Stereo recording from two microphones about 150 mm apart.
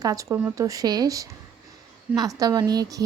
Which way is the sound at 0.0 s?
25° right (ahead or behind).